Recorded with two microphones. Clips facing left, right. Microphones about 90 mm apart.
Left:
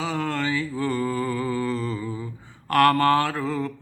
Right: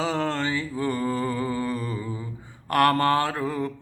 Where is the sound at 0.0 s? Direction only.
30° right (ahead or behind).